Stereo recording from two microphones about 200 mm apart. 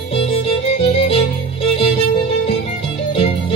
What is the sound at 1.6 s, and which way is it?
Music, 30° left (ahead or behind).